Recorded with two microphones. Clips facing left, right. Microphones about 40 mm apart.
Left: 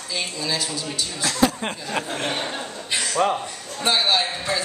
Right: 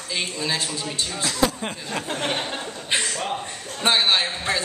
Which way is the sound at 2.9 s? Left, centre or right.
Right.